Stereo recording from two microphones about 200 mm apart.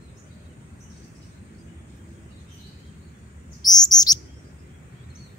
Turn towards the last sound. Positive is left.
turn(degrees=20)  # may be behind; listen again after turning